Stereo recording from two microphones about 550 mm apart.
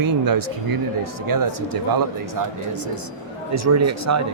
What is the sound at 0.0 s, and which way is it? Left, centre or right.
Speech, right.